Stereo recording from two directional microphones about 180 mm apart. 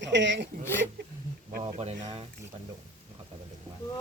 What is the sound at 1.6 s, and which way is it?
Speech, 35° right (ahead or behind).